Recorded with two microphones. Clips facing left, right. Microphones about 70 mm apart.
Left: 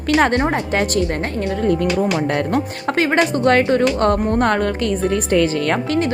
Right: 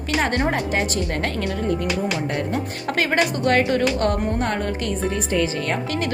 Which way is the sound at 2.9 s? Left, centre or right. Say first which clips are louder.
Left 4 dB; left.